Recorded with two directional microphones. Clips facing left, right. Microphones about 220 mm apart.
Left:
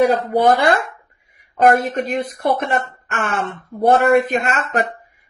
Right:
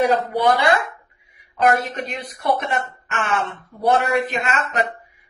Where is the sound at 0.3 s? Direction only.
50° left (ahead or behind).